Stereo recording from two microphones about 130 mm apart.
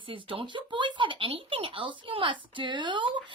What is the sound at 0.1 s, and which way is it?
Speech, 40° right (ahead or behind).